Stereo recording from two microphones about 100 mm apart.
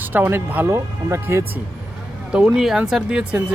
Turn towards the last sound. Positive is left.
turn(degrees=-10)  # may be behind; listen again after turning